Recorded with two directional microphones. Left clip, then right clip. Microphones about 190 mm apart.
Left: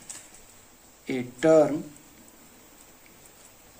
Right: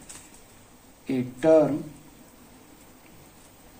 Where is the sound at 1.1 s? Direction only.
35° left (ahead or behind).